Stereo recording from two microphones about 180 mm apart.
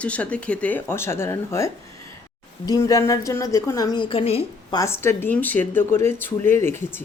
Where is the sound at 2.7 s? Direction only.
20° left (ahead or behind).